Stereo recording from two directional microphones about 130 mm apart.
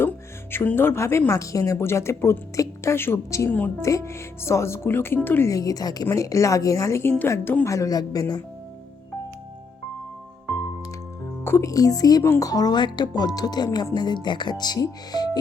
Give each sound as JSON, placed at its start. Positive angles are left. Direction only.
{"t": 0.5, "sound": "speech", "side_deg": 15}
{"t": 11.4, "sound": "speech", "side_deg": 20}